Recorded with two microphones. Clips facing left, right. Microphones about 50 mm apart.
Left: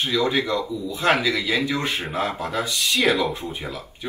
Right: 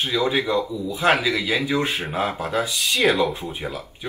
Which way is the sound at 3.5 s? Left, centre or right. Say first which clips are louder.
Right 2 dB; centre.